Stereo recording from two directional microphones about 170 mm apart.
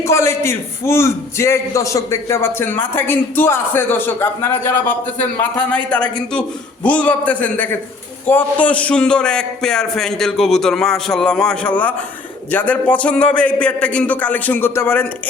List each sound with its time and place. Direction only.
0.0 s a man's voice: 15° left (ahead or behind)